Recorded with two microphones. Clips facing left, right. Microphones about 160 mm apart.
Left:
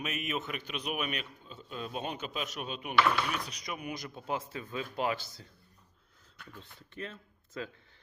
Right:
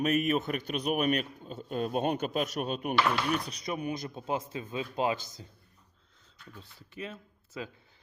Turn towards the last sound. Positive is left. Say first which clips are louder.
# even
turn(degrees=-10)  # may be behind; listen again after turning